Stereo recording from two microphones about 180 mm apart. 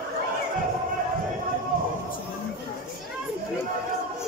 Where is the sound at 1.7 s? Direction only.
50° right (ahead or behind).